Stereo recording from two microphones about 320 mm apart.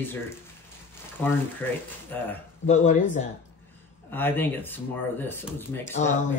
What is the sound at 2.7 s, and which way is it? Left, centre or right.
Speech, left.